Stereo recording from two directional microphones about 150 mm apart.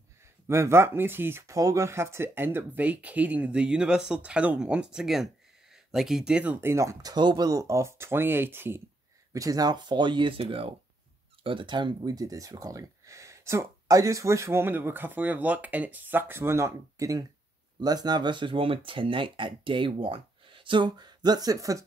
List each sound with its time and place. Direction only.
0.5 s speech: 15° right (ahead or behind)